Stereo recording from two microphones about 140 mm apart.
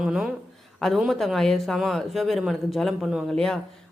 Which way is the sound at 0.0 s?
5° right (ahead or behind).